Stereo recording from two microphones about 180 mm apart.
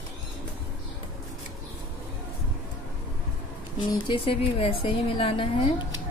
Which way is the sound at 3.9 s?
30° left (ahead or behind).